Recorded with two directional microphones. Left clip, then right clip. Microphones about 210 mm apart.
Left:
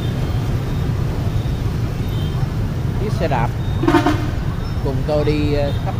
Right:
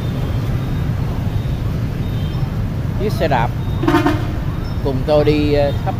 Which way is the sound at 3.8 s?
20° right (ahead or behind).